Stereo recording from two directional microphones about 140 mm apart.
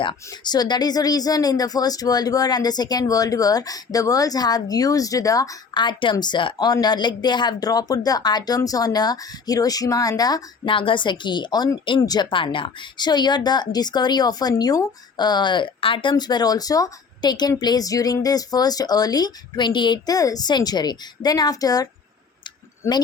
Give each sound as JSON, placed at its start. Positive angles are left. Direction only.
{"t": 0.3, "sound": "speech", "side_deg": 30}